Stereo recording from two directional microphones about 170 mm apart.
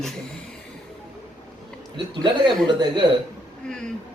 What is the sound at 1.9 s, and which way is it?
Speech, 30° right (ahead or behind).